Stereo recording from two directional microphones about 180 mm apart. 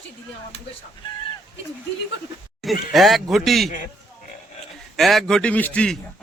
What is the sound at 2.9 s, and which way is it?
Speech, centre (ahead or behind).